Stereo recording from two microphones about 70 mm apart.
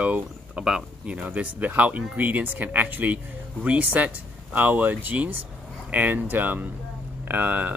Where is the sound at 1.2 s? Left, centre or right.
Right.